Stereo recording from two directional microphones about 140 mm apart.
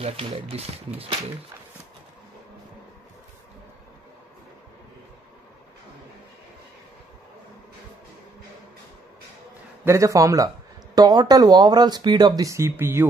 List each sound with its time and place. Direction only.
0.0 s speech: 45° right (ahead or behind)
9.8 s speech: 25° right (ahead or behind)